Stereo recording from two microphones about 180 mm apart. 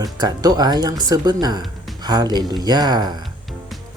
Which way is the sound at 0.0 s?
20° right (ahead or behind).